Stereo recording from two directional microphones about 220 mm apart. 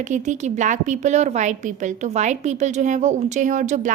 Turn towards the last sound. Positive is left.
turn(degrees=-35)  # may be behind; listen again after turning